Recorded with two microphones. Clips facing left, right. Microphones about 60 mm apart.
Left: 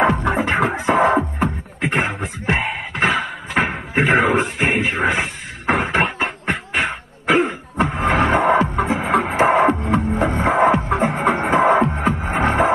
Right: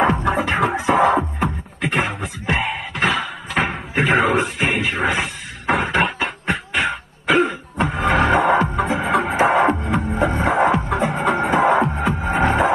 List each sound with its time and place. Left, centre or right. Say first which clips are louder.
0.0 s music: left 1 dB; left
1.8 s beatboxing: left 1 dB; left
7.9 s music: right 1 dB; left